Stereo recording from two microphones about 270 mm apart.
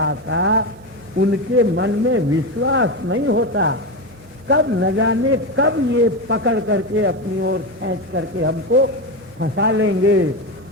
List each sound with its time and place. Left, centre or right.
0.0 s a man's voice: right